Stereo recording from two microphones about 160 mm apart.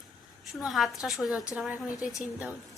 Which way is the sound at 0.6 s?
Centre (ahead or behind).